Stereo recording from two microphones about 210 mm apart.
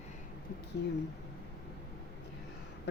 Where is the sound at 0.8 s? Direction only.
50° left (ahead or behind).